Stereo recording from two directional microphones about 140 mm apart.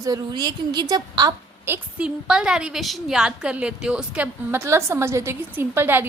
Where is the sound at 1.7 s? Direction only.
10° right (ahead or behind).